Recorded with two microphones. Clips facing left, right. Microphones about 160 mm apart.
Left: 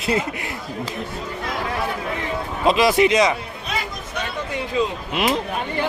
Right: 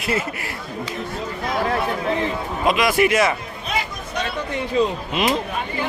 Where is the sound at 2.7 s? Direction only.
25° left (ahead or behind).